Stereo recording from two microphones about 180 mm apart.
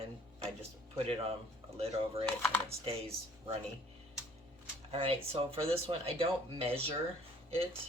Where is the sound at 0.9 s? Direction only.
35° right (ahead or behind).